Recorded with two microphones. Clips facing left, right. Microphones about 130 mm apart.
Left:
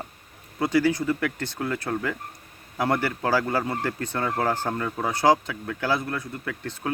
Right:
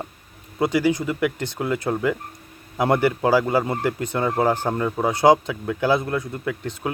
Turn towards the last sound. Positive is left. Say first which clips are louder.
# right 5 dB
turn(degrees=-15)  # may be behind; listen again after turning